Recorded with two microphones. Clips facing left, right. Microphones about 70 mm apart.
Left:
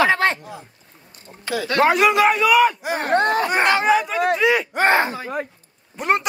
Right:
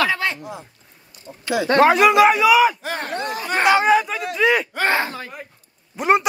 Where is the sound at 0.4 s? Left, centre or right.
Centre.